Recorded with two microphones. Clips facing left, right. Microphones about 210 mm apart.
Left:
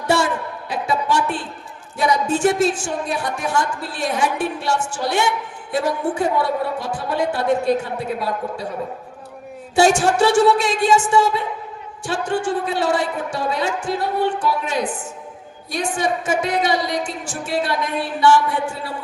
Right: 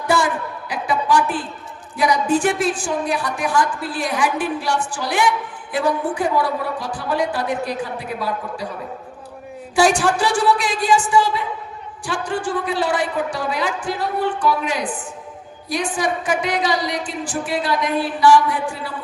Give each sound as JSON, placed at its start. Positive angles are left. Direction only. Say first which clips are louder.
{"t": 0.7, "sound": "a sound", "louder": "right 1 dB", "side_deg": 25}
{"t": 2.0, "sound": "a woman's voice", "louder": "even", "side_deg": 25}
{"t": 9.7, "sound": "a woman's voice", "louder": "left 1 dB", "side_deg": 25}